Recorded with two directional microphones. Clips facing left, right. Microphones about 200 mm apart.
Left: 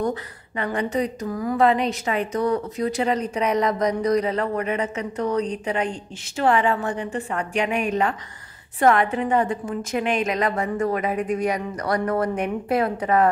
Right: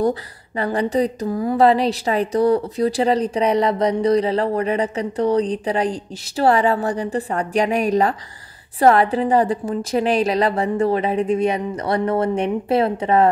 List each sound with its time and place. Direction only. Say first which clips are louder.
0.0 s a woman's voice: right 5 dB; 35° right (ahead or behind)